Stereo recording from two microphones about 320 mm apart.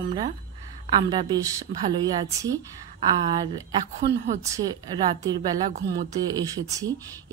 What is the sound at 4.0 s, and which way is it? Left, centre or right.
Speech, right.